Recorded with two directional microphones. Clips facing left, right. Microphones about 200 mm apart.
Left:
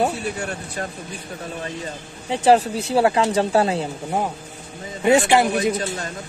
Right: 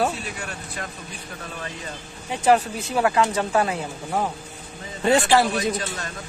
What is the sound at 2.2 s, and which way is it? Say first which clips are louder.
Speech: left 3 dB; 30° left (ahead or behind).